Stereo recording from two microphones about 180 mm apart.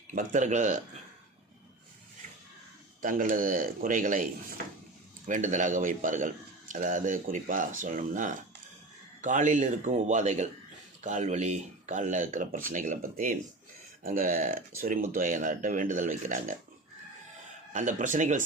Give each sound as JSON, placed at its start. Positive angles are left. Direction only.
{"t": 0.1, "sound": "a man's voice", "side_deg": -45}
{"t": 3.0, "sound": "a man's voice", "side_deg": -50}
{"t": 17.7, "sound": "a man's voice", "side_deg": -45}